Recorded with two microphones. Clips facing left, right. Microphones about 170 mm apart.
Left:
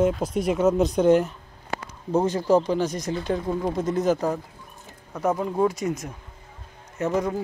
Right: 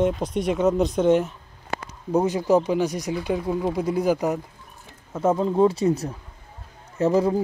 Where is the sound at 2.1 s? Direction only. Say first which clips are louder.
Right 1 dB; 10° right (ahead or behind).